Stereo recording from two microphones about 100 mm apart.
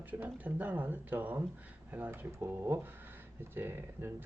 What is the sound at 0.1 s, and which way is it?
Speech, 15° right (ahead or behind).